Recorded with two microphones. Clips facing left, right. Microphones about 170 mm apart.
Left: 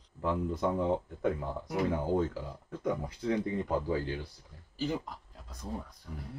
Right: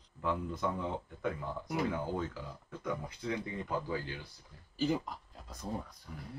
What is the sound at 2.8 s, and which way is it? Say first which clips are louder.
Speech: left 5 dB; 35° left (ahead or behind).